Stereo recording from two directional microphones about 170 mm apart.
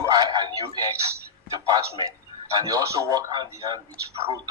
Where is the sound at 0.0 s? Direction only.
25° right (ahead or behind).